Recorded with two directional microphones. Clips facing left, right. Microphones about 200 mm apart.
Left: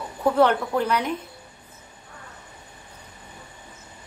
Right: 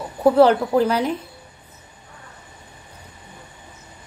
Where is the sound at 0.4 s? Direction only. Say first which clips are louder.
Right 5 dB; 30° right (ahead or behind).